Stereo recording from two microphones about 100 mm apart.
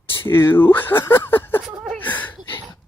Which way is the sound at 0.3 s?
25° left (ahead or behind).